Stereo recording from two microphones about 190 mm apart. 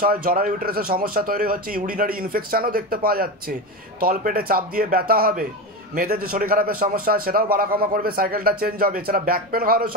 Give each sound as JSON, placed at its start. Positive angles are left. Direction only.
{"t": 0.0, "sound": "a man's voice", "side_deg": -50}